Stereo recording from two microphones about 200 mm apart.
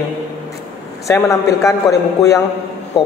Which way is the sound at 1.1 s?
15° left (ahead or behind).